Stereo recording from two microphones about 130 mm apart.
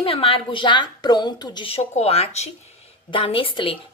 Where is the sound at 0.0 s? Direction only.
45° left (ahead or behind).